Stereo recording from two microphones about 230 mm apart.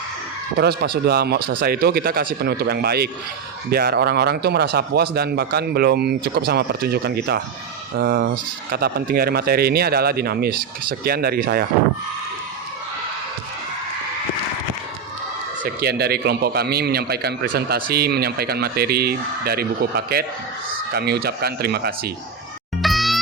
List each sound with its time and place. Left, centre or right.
0.6 s speech: right
15.6 s speech: right
22.8 s music: centre